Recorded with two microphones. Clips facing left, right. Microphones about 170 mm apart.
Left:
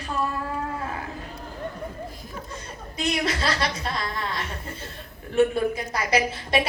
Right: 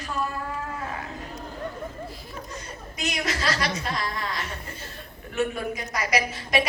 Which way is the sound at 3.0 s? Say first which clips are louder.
Left 4 dB; 30° left (ahead or behind).